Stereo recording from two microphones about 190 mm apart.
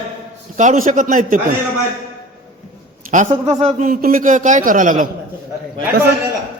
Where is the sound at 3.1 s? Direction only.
40° right (ahead or behind).